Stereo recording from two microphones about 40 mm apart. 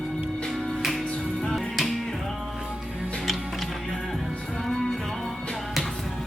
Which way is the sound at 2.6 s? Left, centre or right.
Right.